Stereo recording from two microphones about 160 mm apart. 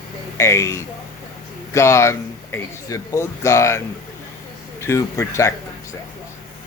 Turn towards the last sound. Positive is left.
turn(degrees=15)  # may be behind; listen again after turning